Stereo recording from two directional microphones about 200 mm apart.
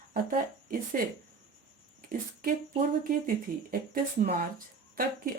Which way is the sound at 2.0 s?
45° right (ahead or behind).